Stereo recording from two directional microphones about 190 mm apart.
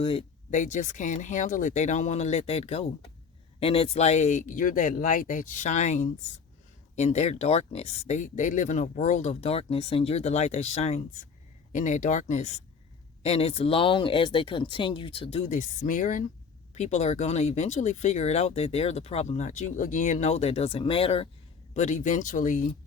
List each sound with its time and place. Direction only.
0.0 s speech: 30° left (ahead or behind)
0.5 s speech: 40° left (ahead or behind)